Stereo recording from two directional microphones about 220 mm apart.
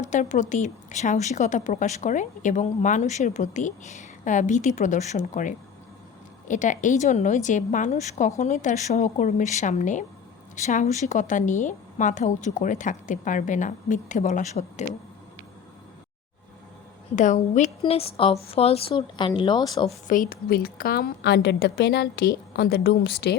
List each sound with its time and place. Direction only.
0.0 s speech: 35° left (ahead or behind)
17.2 s a woman's voice: 35° left (ahead or behind); by 19.9 s 20° left (ahead or behind)
20.1 s a woman's voice: 40° left (ahead or behind)